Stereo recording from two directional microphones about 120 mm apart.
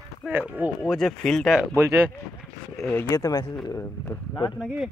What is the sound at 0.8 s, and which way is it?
Speech, centre (ahead or behind).